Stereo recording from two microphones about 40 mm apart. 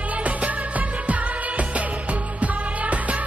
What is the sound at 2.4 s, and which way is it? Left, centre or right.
Music, right.